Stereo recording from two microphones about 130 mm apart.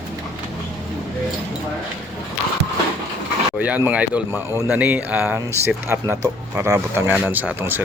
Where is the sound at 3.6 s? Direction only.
10° right (ahead or behind).